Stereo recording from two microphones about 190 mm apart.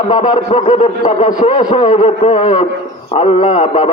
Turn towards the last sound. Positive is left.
turn(degrees=35)  # may be behind; listen again after turning